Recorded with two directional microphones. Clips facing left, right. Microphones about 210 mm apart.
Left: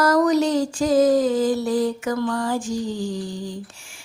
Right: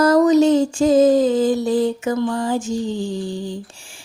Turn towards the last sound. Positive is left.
turn(degrees=-30)  # may be behind; listen again after turning